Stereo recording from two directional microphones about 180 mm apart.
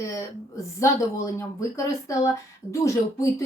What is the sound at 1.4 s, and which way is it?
A woman's voice, 15° left (ahead or behind).